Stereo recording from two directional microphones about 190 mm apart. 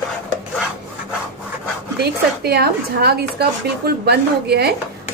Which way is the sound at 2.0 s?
55° right (ahead or behind).